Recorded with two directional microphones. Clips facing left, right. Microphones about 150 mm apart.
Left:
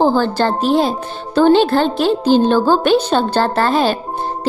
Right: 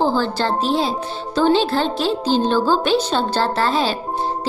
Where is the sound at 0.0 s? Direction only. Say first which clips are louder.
Left 5 dB; 55° left (ahead or behind).